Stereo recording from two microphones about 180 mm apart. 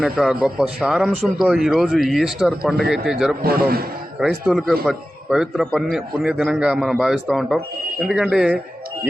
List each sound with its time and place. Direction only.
0.0 s a man's voice: centre (ahead or behind)
3.4 s a man's voice: 55° right (ahead or behind)
4.2 s a man's voice: centre (ahead or behind)